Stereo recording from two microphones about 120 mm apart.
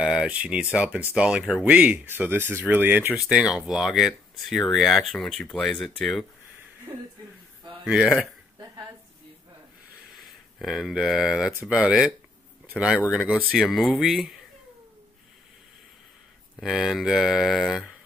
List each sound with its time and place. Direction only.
0.0 s speech: 5° right (ahead or behind)
3.2 s speech: 5° right (ahead or behind)
6.9 s speech: 30° right (ahead or behind)
7.8 s speech: 5° right (ahead or behind)
10.1 s speech: centre (ahead or behind)
16.5 s speech: centre (ahead or behind)